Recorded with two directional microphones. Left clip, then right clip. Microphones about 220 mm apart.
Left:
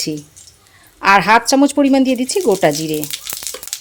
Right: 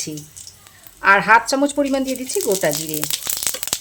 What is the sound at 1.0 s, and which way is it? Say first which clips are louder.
Frying: left 2 dB; 40° left (ahead or behind).